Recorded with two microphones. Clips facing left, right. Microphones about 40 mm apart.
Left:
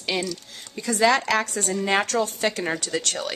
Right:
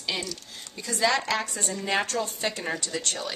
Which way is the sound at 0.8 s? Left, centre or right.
Left.